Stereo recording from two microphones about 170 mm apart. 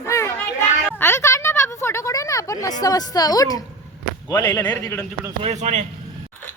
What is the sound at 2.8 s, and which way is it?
A woman's voice, 20° left (ahead or behind).